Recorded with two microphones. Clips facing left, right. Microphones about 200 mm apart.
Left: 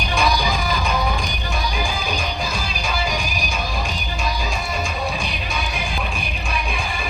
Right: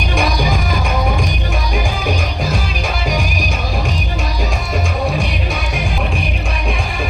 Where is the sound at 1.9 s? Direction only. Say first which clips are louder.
Right 5 dB; 70° right (ahead or behind).